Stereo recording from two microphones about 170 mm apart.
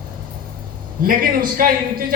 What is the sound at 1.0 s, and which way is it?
A woman's voice, 55° right (ahead or behind).